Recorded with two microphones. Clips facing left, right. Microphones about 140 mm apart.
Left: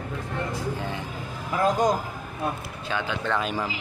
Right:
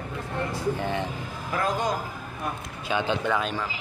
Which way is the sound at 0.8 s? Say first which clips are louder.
Right 4 dB; 65° right (ahead or behind).